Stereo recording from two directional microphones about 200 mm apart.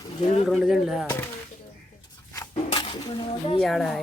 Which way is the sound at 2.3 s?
25° left (ahead or behind).